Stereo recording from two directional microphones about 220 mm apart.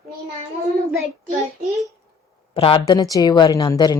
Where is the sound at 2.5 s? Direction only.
25° left (ahead or behind).